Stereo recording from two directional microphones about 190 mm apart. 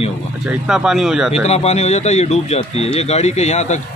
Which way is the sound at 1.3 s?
35° left (ahead or behind).